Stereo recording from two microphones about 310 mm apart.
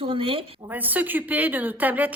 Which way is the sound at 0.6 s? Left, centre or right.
Centre.